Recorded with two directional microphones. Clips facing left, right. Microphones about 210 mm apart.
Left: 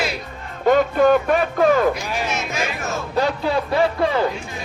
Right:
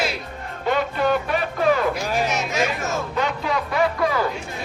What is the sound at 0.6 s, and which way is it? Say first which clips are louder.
Music: left 7 dB; 45° left (ahead or behind).